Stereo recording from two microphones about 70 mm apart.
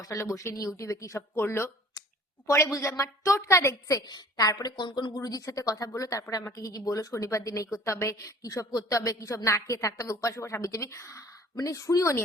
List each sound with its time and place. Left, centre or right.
0.0 s a woman's voice: left
4.0 s a woman's voice: left
8.4 s a woman's voice: left